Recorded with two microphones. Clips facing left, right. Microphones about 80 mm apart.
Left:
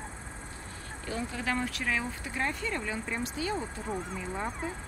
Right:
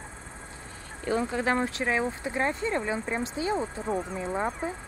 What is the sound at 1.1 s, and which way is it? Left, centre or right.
Speech, right.